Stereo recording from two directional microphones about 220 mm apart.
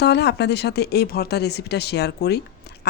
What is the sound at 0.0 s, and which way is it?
A woman's voice, 50° left (ahead or behind).